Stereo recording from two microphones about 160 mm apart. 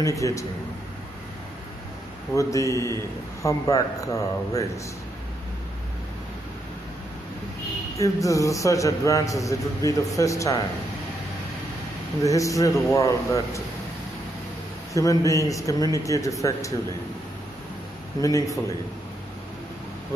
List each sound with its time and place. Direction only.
0.0 s a man's voice: 20° left (ahead or behind)
2.3 s a man's voice: 20° left (ahead or behind)
8.0 s a man's voice: 20° left (ahead or behind)
12.2 s a man's voice: 20° left (ahead or behind)
15.0 s a man's voice: 20° left (ahead or behind)
18.2 s a man's voice: 20° left (ahead or behind)